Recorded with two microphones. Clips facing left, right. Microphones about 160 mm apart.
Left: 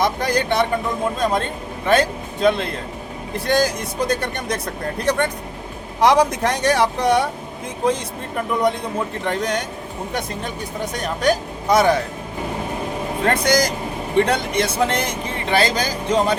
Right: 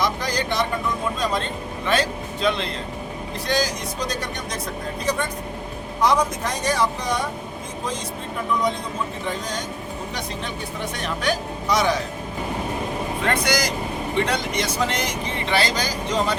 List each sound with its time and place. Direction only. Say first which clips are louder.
0.0 s speech: left 4 dB; 55° left (ahead or behind)
9.2 s speech: left 6 dB; 65° left (ahead or behind)
10.9 s speech: left 6 dB; 45° left (ahead or behind)
13.2 s speech: left 5 dB; 45° left (ahead or behind)